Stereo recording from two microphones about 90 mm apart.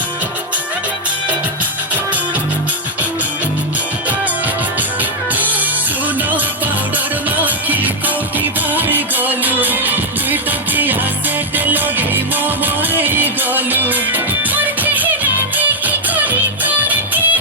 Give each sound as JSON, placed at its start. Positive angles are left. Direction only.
{"t": 7.3, "sound": "music", "side_deg": -20}
{"t": 11.5, "sound": "music", "side_deg": -20}